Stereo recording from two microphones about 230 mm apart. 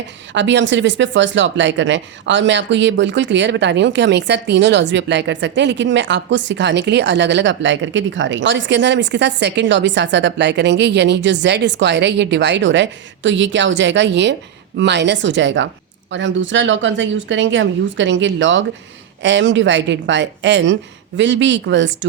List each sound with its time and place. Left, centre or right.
0.3 s speech: right